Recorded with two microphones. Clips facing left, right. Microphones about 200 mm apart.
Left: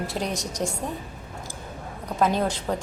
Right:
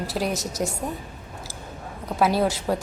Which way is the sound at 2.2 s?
5° right (ahead or behind).